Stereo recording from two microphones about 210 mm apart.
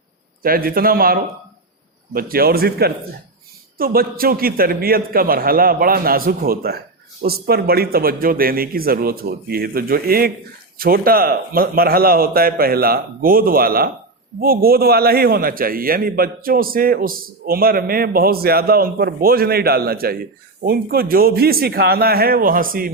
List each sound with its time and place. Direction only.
0.4 s a man's voice: 45° right (ahead or behind)